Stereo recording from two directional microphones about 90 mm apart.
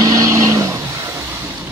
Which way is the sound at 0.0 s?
40° right (ahead or behind).